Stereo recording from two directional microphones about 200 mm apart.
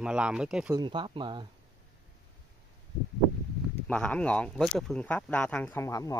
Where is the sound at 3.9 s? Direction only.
5° left (ahead or behind).